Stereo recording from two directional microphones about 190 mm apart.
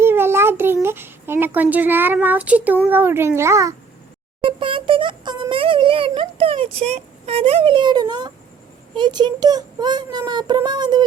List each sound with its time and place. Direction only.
0.0 s a child's voice: 10° right (ahead or behind)
4.4 s speech: 25° right (ahead or behind)